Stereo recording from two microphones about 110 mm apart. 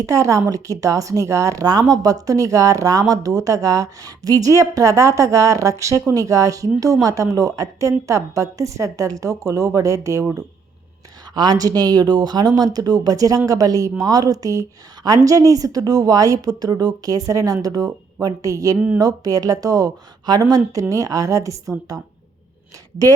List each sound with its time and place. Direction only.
0.0 s a woman's voice: 30° right (ahead or behind)